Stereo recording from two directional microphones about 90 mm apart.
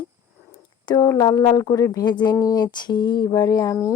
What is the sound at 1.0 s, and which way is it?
Speech, 40° left (ahead or behind).